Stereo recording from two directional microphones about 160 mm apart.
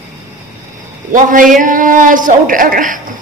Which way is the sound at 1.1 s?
55° right (ahead or behind).